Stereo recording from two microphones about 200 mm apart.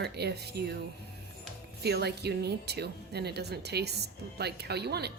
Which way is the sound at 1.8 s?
55° right (ahead or behind).